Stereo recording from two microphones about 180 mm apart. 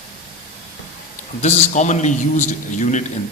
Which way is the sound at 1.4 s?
40° left (ahead or behind).